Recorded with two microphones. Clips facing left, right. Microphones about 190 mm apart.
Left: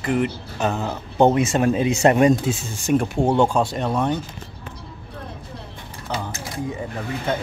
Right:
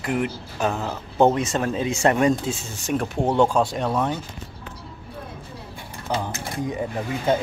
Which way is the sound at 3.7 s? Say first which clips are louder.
Left 1 dB; 5° right (ahead or behind).